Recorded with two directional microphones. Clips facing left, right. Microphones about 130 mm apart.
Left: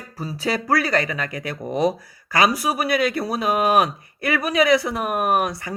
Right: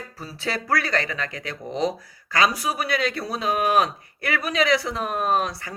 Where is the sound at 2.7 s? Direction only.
10° left (ahead or behind).